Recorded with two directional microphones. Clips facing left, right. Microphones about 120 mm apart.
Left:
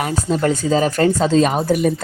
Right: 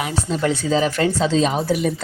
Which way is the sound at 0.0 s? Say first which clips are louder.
Left 3 dB; 45° left (ahead or behind).